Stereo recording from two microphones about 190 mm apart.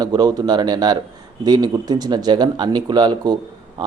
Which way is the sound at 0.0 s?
20° right (ahead or behind).